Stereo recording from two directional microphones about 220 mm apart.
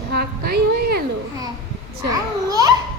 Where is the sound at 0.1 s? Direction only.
45° right (ahead or behind).